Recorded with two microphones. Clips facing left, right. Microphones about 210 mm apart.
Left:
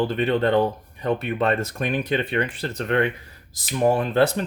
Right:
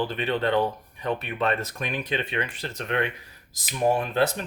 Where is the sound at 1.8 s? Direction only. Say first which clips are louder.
Left 6 dB; 55° left (ahead or behind).